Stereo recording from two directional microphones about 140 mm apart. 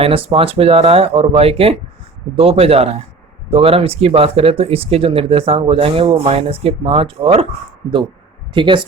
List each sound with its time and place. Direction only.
0.0 s speech: 40° right (ahead or behind)
8.5 s speech: 35° right (ahead or behind)